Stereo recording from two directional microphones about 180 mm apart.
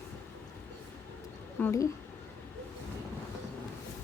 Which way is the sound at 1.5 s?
15° left (ahead or behind).